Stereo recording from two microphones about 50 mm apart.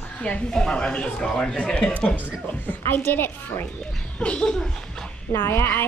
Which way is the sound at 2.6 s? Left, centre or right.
Left.